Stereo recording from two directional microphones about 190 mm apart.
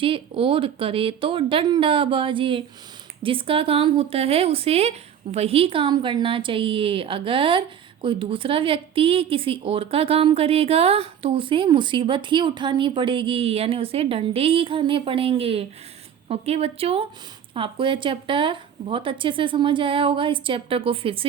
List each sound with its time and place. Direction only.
0.0 s a woman's voice: 30° right (ahead or behind)